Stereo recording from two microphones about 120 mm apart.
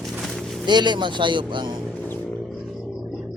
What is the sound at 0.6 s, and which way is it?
A man's voice, 40° right (ahead or behind).